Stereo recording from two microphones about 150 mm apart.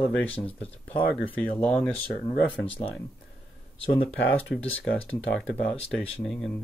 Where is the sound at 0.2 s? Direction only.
10° left (ahead or behind).